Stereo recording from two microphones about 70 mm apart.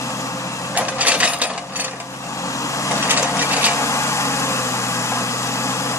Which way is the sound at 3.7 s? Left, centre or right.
Left.